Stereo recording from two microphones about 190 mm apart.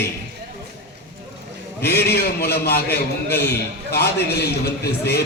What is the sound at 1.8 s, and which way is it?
A man's voice, 60° left (ahead or behind).